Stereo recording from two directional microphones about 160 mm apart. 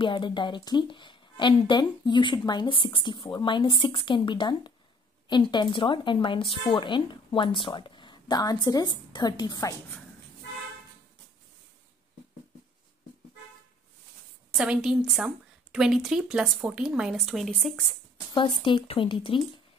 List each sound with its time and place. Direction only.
0.0 s speech: 30° left (ahead or behind)
14.6 s a woman's voice: 5° right (ahead or behind)
18.3 s speech: 30° left (ahead or behind)